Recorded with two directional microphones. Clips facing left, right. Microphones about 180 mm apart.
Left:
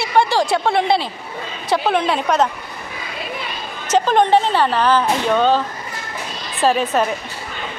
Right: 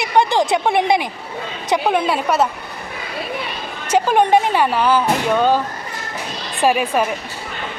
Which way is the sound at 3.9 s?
10° right (ahead or behind).